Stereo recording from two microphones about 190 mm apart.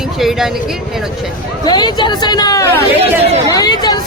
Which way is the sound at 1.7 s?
20° left (ahead or behind).